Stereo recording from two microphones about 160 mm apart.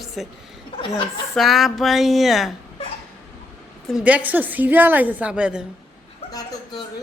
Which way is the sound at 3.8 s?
5° right (ahead or behind).